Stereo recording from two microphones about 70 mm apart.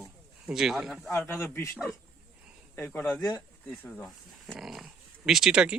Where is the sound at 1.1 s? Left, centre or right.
Left.